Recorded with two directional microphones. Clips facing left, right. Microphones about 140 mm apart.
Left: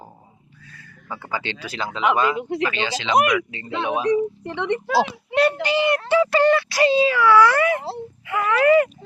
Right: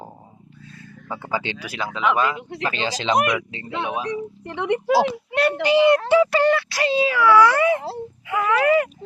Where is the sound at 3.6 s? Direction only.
5° right (ahead or behind).